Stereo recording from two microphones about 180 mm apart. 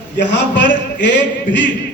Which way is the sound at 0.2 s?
80° left.